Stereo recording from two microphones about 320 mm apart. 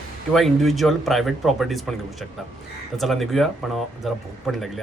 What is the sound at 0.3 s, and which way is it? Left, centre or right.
Speech, centre.